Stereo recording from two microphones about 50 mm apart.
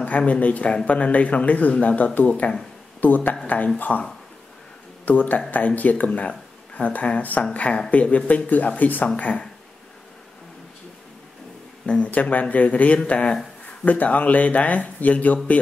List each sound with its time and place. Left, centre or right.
0.0 s speech: left
5.0 s speech: left
12.0 s speech: left